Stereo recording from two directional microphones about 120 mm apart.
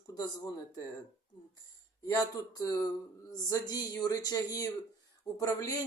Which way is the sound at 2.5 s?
30° left (ahead or behind).